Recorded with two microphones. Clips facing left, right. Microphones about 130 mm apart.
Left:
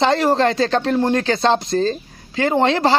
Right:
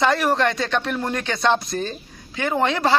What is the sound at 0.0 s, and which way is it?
Speech, 25° left (ahead or behind).